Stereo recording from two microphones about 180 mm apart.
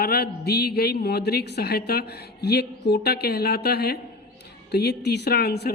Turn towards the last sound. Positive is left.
turn(degrees=65)  # may be behind; listen again after turning